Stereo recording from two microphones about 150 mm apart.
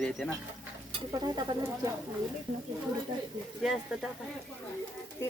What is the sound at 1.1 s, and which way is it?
Bird, 25° right (ahead or behind).